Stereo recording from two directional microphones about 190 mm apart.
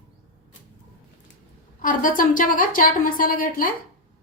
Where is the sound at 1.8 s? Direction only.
45° left (ahead or behind).